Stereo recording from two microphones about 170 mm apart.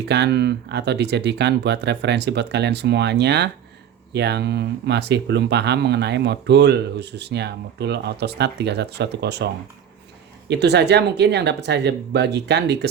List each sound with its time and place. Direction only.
0.0 s speech: 75° right (ahead or behind)
10.5 s speech: 80° right